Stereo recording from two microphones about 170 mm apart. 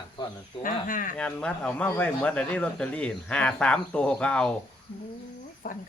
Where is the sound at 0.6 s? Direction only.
55° left (ahead or behind).